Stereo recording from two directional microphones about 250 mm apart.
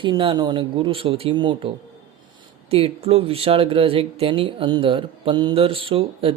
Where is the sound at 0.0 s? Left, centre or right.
Centre.